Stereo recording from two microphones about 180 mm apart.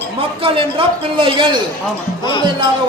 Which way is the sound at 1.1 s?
30° right (ahead or behind).